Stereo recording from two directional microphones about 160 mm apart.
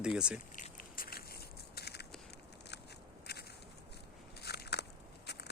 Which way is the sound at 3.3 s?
80° left.